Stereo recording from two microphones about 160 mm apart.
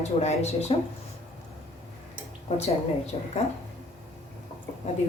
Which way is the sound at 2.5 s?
40° left (ahead or behind).